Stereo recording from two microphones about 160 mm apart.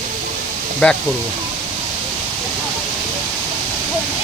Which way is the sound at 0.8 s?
10° left (ahead or behind).